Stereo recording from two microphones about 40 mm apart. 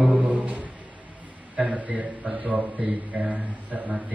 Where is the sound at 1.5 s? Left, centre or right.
Right.